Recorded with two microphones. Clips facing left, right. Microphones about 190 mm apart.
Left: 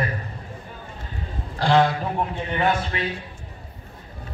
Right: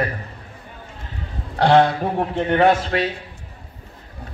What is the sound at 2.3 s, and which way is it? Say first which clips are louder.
Speech: right 10 dB; 75° right (ahead or behind).